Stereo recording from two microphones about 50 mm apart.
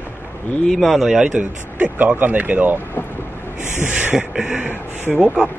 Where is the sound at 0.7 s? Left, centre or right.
Centre.